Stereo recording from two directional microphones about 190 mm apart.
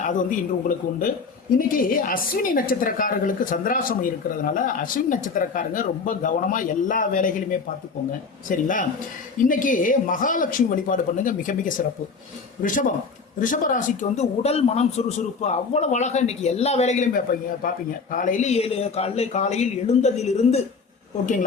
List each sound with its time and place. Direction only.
0.0 s a man's voice: 40° left (ahead or behind)
1.5 s a woman's voice: 45° left (ahead or behind)
8.4 s a woman's voice: 45° left (ahead or behind)
13.4 s a man's voice: 45° left (ahead or behind)